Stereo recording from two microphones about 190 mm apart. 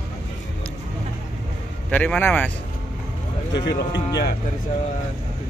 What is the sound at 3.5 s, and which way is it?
Speech, 65° left (ahead or behind).